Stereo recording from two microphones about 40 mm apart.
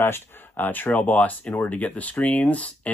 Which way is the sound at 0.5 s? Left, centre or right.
Left.